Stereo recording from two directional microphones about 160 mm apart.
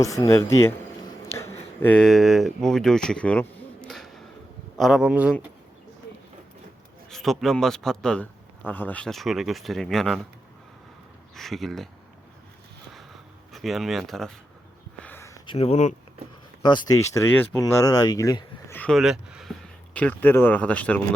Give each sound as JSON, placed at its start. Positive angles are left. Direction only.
{"t": 0.0, "sound": "speech", "side_deg": 20}
{"t": 1.8, "sound": "a man's voice", "side_deg": 5}
{"t": 7.1, "sound": "a man's voice", "side_deg": 0}
{"t": 11.3, "sound": "a man's voice", "side_deg": 0}
{"t": 13.5, "sound": "a man's voice", "side_deg": 0}
{"t": 15.0, "sound": "a sound", "side_deg": 10}
{"t": 15.4, "sound": "speech", "side_deg": 40}
{"t": 16.6, "sound": "speech", "side_deg": 25}
{"t": 17.2, "sound": "speech", "side_deg": 10}
{"t": 17.6, "sound": "speech", "side_deg": 25}
{"t": 18.8, "sound": "speech", "side_deg": 0}